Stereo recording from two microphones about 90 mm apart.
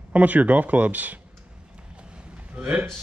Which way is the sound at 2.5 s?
15° right (ahead or behind).